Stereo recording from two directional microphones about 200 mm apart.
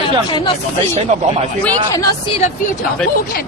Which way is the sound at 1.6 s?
20° left (ahead or behind).